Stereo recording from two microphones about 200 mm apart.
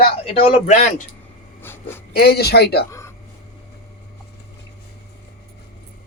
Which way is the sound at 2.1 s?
50° left (ahead or behind).